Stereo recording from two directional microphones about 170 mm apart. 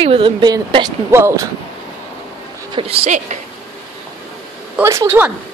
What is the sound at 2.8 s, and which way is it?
Speech, 35° right (ahead or behind).